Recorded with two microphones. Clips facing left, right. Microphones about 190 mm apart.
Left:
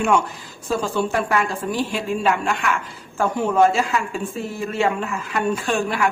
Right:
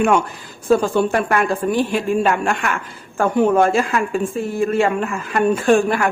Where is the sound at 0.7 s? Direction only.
55° right (ahead or behind).